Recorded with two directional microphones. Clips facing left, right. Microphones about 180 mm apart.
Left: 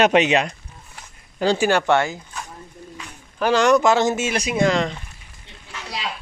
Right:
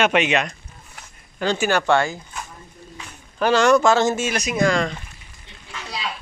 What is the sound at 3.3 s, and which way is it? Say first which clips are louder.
Speech: even; 10° left (ahead or behind).